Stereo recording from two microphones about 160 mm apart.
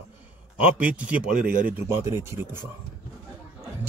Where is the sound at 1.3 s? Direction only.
60° right (ahead or behind).